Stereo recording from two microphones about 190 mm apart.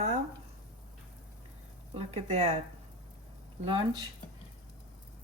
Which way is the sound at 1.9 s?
35° right (ahead or behind).